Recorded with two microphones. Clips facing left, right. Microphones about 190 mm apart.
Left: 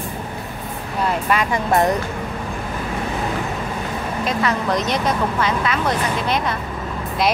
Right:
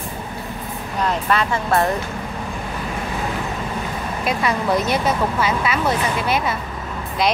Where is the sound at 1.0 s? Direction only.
10° left (ahead or behind).